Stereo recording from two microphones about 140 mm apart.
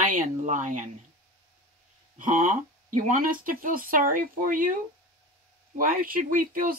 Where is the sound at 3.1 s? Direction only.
85° right.